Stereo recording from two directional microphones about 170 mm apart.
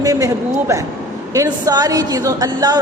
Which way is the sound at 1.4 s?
20° right (ahead or behind).